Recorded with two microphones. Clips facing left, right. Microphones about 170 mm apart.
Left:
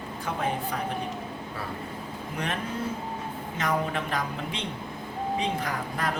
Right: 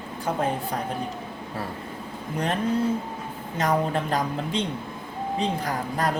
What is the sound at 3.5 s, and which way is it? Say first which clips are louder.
Speech: right 5 dB; 35° right (ahead or behind).